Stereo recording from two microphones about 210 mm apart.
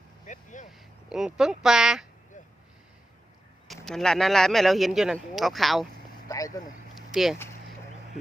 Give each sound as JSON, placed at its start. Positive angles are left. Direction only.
{"t": 0.3, "sound": "vehicle", "side_deg": 35}
{"t": 1.1, "sound": "speech", "side_deg": 0}
{"t": 3.8, "sound": "speech", "side_deg": 0}
{"t": 6.2, "sound": "vehicle", "side_deg": 15}
{"t": 7.1, "sound": "speech", "side_deg": 0}